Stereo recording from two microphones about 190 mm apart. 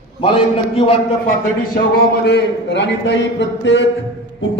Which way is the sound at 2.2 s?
65° left (ahead or behind).